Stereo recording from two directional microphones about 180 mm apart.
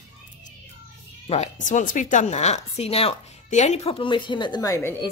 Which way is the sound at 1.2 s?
40° left (ahead or behind).